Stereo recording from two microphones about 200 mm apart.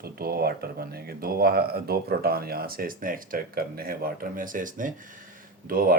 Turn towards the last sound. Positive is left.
turn(degrees=-45)  # may be behind; listen again after turning